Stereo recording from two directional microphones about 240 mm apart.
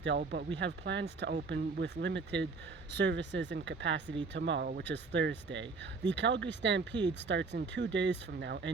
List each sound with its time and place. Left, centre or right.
0.2 s speech: right